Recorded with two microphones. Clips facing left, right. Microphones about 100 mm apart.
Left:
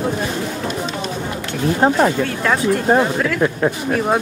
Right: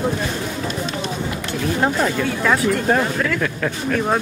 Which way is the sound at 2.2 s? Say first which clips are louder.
Even; 5° right (ahead or behind).